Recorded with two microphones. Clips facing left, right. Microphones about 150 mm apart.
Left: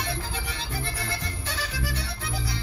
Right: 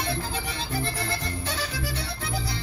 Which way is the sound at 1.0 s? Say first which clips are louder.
Right 3 dB; 40° right (ahead or behind).